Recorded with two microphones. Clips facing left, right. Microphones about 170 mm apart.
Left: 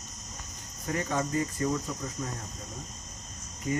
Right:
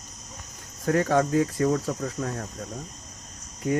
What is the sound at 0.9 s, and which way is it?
Speech, 70° right (ahead or behind).